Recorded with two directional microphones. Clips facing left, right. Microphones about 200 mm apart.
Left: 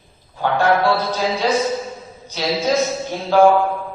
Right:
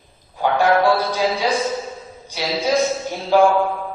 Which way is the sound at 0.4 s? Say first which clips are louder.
Right 1 dB; 15° right (ahead or behind).